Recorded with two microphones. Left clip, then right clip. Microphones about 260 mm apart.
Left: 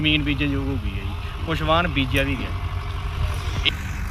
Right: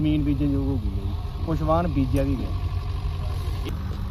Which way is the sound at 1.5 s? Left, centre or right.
Centre.